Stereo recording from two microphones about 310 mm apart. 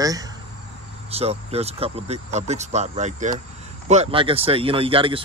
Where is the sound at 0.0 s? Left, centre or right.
Centre.